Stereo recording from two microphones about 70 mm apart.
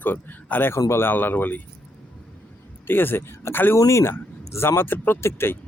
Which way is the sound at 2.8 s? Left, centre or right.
Left.